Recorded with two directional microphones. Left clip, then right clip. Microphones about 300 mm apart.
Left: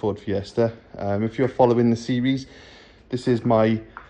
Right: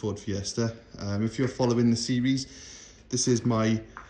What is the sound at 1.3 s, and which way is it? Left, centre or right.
Speech, centre.